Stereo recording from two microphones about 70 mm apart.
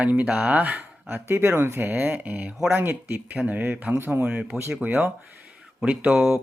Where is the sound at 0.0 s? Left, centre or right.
Right.